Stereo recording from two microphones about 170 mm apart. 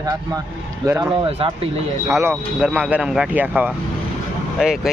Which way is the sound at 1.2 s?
30° right (ahead or behind).